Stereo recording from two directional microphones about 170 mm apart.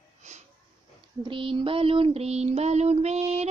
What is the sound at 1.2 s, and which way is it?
Child singing, 30° right (ahead or behind).